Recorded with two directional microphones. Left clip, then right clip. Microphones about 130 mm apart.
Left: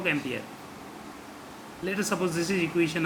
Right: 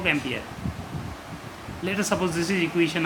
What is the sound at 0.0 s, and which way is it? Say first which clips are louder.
Speech: right 4 dB; 15° right (ahead or behind).